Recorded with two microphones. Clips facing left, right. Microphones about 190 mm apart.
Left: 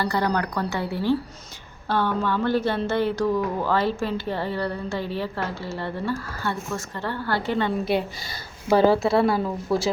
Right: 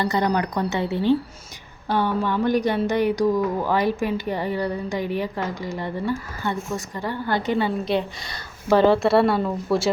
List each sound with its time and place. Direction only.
0.0 s a woman's voice: 20° right (ahead or behind)
8.6 s speech: 10° left (ahead or behind)